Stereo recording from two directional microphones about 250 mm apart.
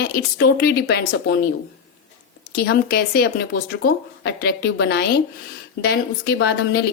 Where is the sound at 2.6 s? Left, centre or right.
Left.